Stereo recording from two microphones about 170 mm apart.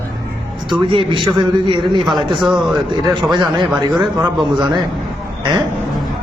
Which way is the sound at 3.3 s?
25° right (ahead or behind).